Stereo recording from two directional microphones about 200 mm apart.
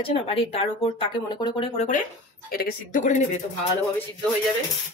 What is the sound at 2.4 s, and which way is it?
Speech, 45° left (ahead or behind).